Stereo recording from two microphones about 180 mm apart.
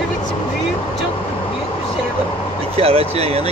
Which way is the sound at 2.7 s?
35° right (ahead or behind).